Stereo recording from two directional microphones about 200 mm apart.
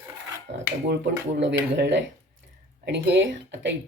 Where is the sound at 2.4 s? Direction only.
60° right (ahead or behind).